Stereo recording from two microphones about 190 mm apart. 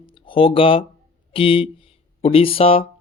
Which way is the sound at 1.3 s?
30° left (ahead or behind).